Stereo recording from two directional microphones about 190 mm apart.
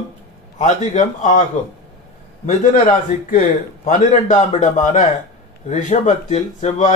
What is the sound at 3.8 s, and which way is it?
Speech, 40° left (ahead or behind).